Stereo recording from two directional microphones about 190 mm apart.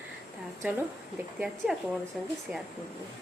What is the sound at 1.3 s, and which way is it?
Speech, centre (ahead or behind).